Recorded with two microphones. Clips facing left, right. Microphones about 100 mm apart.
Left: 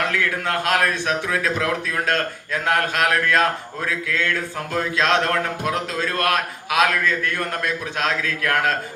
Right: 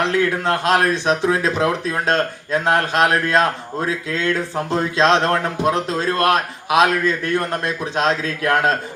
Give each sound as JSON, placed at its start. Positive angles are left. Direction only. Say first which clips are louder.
{"t": 0.0, "sound": "speech", "louder": "right 5 dB", "side_deg": -25}